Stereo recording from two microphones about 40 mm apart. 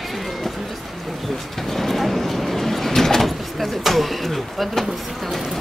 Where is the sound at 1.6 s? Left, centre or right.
Centre.